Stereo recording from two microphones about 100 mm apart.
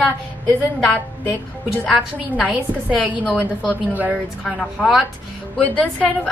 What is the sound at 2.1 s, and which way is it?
A woman's voice, 15° right (ahead or behind).